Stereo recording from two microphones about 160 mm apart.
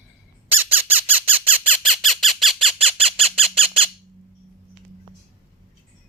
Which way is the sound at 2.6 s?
35° right (ahead or behind).